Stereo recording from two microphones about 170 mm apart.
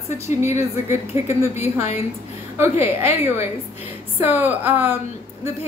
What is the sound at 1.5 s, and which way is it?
Speech, 40° left (ahead or behind).